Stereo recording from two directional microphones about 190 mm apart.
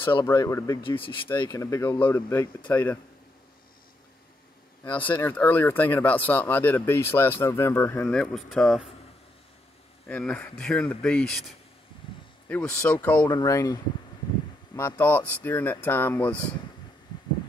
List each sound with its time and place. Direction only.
0.3 s speech: 15° left (ahead or behind)
5.0 s speech: 10° left (ahead or behind)
10.0 s speech: 5° left (ahead or behind)
14.8 s speech: 15° left (ahead or behind)